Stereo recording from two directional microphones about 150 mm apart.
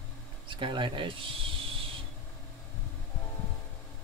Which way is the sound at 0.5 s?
35° right (ahead or behind).